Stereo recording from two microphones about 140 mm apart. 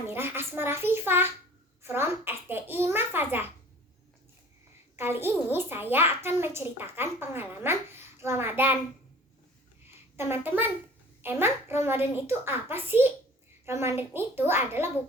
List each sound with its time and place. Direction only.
0.1 s a child's voice: 15° right (ahead or behind)
4.9 s a child's voice: 15° right (ahead or behind)
10.2 s a child's voice: 15° right (ahead or behind)